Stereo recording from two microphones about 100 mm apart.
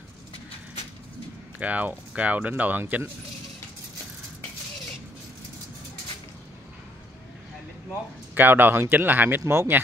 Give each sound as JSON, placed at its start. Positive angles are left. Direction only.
{"t": 1.6, "sound": "speech", "side_deg": -15}
{"t": 8.4, "sound": "speech", "side_deg": -20}